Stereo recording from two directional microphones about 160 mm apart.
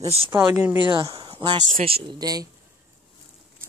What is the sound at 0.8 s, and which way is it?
Speech, 30° right (ahead or behind).